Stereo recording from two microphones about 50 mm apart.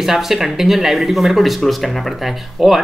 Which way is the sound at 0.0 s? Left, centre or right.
Centre.